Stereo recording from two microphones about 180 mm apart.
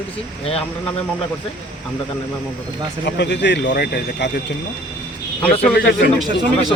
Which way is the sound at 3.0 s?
70° left (ahead or behind).